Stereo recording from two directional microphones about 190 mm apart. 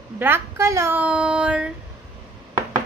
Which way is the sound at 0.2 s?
10° right (ahead or behind).